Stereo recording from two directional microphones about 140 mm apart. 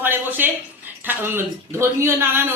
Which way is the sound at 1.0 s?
15° right (ahead or behind).